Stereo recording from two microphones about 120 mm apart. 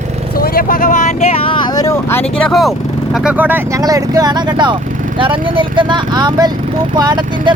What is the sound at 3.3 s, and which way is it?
Speech, 15° right (ahead or behind).